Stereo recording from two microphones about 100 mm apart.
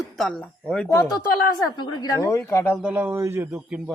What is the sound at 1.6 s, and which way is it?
Speech, 40° left (ahead or behind).